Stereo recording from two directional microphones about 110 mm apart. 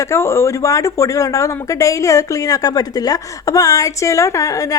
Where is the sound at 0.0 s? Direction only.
25° left (ahead or behind).